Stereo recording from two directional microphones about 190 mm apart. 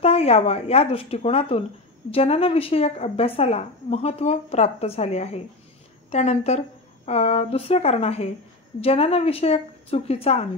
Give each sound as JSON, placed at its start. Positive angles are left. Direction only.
{"t": 0.0, "sound": "a woman's voice", "side_deg": 30}